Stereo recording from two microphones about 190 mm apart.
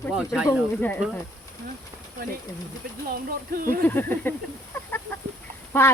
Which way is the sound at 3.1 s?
50° right (ahead or behind).